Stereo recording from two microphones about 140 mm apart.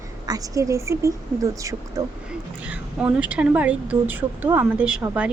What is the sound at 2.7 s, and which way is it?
A woman's voice, 10° right (ahead or behind).